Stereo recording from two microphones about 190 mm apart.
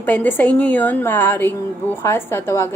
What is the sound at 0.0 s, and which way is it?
A woman's voice, 10° left (ahead or behind).